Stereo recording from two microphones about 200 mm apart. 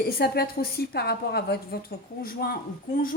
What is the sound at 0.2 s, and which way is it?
A woman's voice, 50° left (ahead or behind).